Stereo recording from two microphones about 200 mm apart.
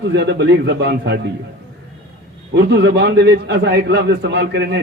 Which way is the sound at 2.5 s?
60° right (ahead or behind).